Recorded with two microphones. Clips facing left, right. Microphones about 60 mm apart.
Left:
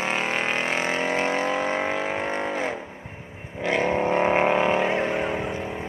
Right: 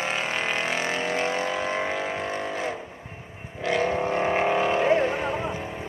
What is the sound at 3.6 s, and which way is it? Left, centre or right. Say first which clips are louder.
Vehicle: left 1 dB; centre.